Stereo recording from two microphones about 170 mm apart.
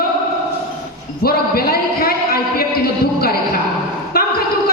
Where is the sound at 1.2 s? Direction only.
65° left (ahead or behind).